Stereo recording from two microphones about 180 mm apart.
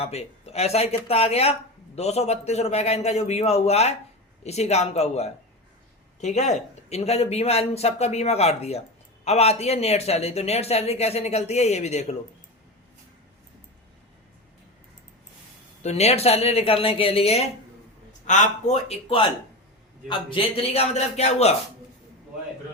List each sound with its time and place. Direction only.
0.0 s speech: 35° left (ahead or behind)
15.8 s speech: 35° left (ahead or behind)
20.3 s speech: 35° left (ahead or behind)